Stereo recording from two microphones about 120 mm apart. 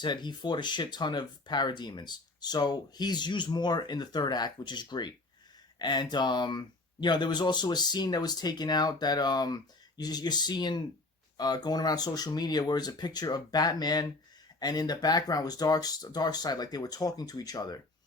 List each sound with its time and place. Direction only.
0.0 s speech: 40° left (ahead or behind)